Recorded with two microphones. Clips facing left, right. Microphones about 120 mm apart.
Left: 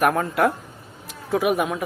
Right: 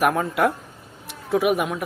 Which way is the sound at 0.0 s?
Centre (ahead or behind).